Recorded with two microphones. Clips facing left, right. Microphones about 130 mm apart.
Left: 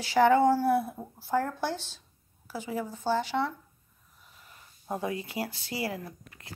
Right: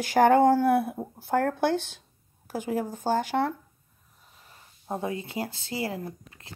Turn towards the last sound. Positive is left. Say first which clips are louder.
# right 2 dB
turn(degrees=-25)  # may be behind; listen again after turning